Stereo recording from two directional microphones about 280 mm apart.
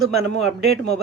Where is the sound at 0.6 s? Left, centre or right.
Right.